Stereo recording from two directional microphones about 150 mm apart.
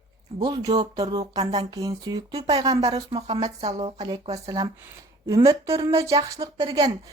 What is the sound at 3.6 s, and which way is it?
Speech, 45° right (ahead or behind).